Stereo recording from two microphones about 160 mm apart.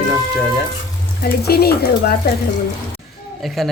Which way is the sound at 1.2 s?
75° left (ahead or behind).